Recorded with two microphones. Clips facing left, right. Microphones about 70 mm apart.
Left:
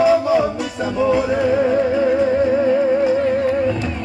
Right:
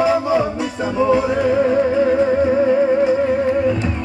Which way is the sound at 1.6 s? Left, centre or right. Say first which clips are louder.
Right 1 dB; centre.